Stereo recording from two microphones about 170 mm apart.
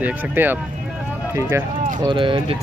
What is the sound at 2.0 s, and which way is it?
Speech, 30° right (ahead or behind).